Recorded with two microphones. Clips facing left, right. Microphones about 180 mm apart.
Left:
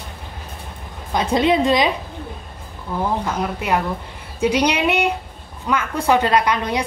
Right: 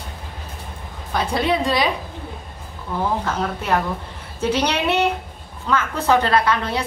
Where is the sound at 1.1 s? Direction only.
20° left (ahead or behind).